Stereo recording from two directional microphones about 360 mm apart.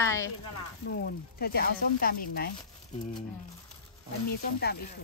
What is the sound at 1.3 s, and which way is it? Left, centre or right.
Speech, left.